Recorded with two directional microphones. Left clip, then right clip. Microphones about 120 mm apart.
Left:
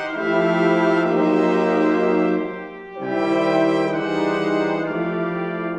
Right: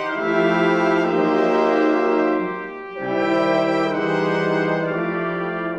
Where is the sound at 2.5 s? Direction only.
35° left (ahead or behind).